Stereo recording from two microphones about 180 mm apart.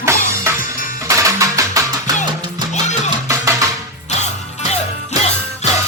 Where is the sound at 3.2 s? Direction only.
15° right (ahead or behind).